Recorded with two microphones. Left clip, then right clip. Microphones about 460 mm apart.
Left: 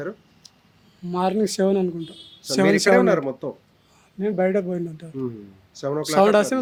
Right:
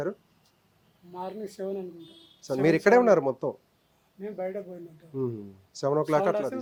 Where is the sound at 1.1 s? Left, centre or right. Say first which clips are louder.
Left 14 dB; left.